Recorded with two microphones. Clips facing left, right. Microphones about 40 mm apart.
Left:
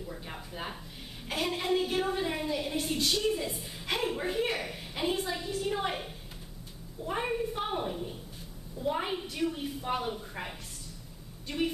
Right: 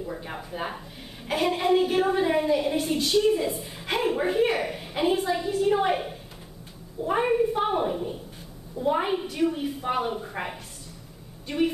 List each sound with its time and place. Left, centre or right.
0.0 s a woman's voice: right